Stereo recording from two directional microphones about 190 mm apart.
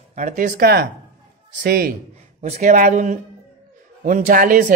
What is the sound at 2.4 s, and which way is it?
A man's voice, 40° right (ahead or behind).